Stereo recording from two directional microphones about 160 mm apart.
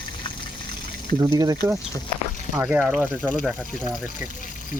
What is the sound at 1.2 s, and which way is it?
Speech, 25° right (ahead or behind).